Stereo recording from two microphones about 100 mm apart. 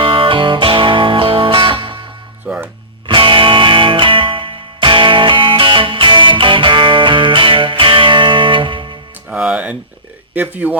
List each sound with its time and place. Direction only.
0.0 s music: 60° right (ahead or behind)
2.5 s music: 20° right (ahead or behind)
3.1 s music: 55° right (ahead or behind)
9.3 s music: 10° right (ahead or behind)
10.3 s speech: 15° right (ahead or behind)